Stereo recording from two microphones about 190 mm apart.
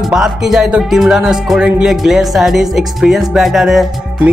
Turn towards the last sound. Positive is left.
turn(degrees=0)  # may be behind; listen again after turning